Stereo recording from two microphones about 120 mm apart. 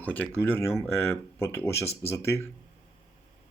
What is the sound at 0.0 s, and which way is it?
Speech, 15° left (ahead or behind).